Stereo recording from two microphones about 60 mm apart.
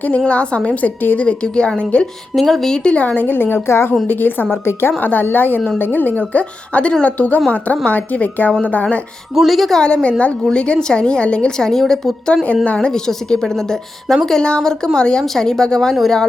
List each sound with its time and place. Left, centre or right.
0.3 s a woman's voice: centre
2.3 s a woman's voice: centre
3.2 s a woman's voice: left
9.3 s a woman's voice: centre
9.8 s a woman's voice: centre
12.3 s a woman's voice: centre